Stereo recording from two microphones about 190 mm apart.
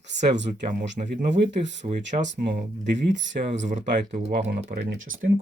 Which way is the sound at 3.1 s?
75° right (ahead or behind).